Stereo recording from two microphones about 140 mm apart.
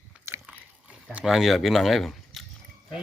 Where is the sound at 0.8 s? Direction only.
10° right (ahead or behind).